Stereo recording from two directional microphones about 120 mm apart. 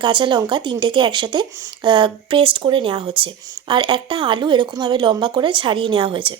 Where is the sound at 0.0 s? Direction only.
40° right (ahead or behind).